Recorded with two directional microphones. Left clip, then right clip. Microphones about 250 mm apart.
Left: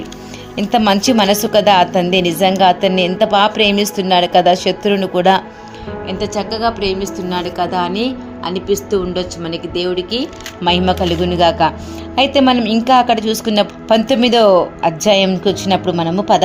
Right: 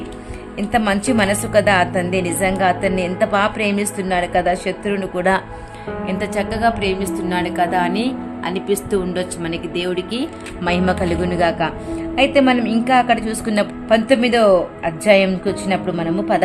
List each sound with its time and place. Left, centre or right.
0.7 s a woman's voice: centre
6.1 s a woman's voice: centre